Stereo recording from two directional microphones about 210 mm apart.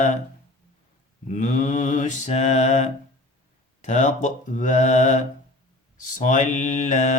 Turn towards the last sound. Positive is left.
turn(degrees=35)  # may be behind; listen again after turning